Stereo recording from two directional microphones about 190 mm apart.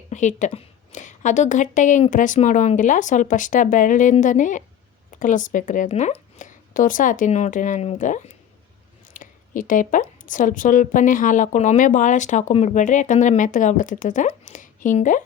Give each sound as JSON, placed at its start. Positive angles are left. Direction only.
{"t": 0.1, "sound": "a woman's voice", "side_deg": 40}